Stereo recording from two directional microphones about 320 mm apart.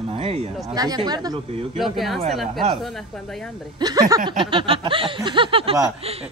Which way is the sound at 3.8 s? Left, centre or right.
Centre.